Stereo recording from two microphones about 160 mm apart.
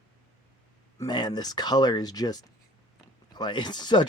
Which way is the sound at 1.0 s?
25° left (ahead or behind).